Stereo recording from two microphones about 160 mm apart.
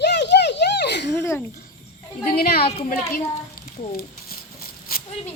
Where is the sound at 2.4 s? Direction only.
75° left (ahead or behind).